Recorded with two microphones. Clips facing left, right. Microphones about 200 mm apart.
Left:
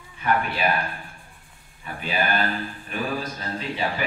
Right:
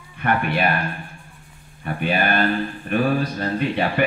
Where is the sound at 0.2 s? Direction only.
60° right (ahead or behind).